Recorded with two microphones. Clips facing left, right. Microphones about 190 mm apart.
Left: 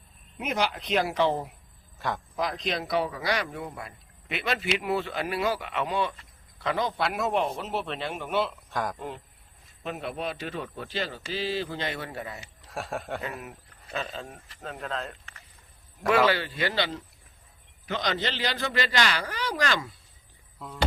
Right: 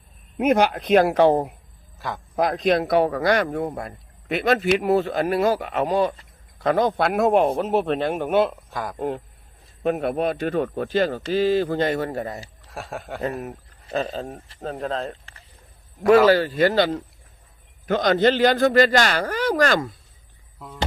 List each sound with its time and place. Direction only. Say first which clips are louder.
0.3 s speech: right 10 dB; 55° right (ahead or behind)
2.0 s a man's voice: even; centre (ahead or behind)
2.3 s speech: right 13 dB; 50° right (ahead or behind)
8.7 s speech: even; centre (ahead or behind)
9.0 s speech: right 11 dB; 50° right (ahead or behind)
12.6 s speech: left 1 dB; centre (ahead or behind)
13.9 s speech: right 9 dB; 40° right (ahead or behind)